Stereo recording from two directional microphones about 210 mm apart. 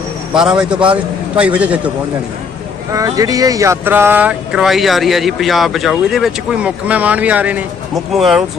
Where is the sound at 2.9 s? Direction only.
15° right (ahead or behind).